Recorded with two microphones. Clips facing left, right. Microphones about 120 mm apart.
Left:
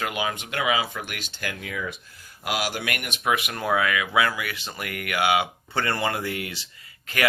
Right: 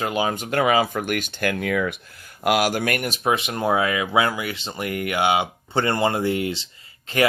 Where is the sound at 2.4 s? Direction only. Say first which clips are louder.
Right 8 dB; 55° right (ahead or behind).